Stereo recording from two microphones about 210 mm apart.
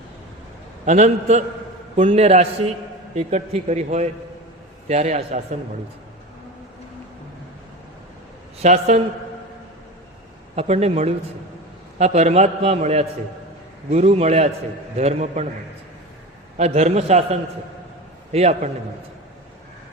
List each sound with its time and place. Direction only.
0.9 s a man's voice: 35° right (ahead or behind)
8.6 s a man's voice: 30° right (ahead or behind)
10.5 s a man's voice: 30° right (ahead or behind)
16.6 s a man's voice: 30° right (ahead or behind)
18.3 s a man's voice: 30° right (ahead or behind)